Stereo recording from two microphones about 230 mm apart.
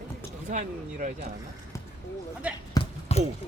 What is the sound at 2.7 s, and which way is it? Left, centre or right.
Basketball bounce, left.